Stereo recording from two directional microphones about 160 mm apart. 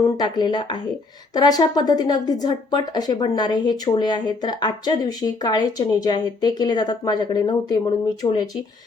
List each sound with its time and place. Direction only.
0.0 s speech: 25° left (ahead or behind)